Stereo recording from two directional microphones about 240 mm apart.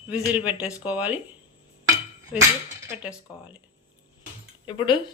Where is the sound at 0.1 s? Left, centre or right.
Centre.